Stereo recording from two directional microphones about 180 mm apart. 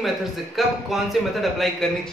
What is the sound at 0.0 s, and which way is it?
Speech, centre (ahead or behind).